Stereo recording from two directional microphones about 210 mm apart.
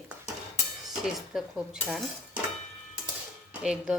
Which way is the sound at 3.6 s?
5° right (ahead or behind).